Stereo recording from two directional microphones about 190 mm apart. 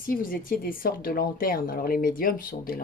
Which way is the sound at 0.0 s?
45° left (ahead or behind).